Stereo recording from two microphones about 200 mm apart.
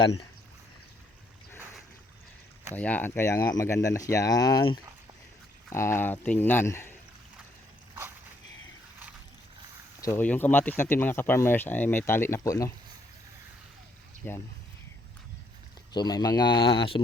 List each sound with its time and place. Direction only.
2.7 s speech: 5° left (ahead or behind)
10.0 s speech: 10° left (ahead or behind)
14.2 s speech: 10° left (ahead or behind)
15.9 s speech: 20° left (ahead or behind)